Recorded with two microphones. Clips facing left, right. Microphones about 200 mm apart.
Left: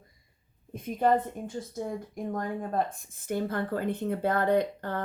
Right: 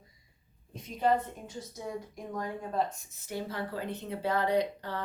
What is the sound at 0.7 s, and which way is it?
A woman's voice, 55° left (ahead or behind).